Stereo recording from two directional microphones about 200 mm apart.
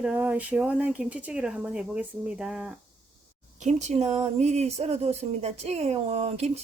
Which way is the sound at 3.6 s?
35° right (ahead or behind).